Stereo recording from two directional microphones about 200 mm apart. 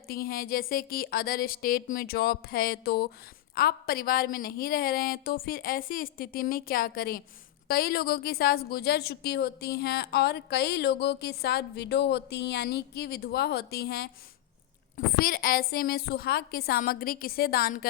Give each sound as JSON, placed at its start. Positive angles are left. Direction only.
{"t": 0.1, "sound": "a woman's voice", "side_deg": 45}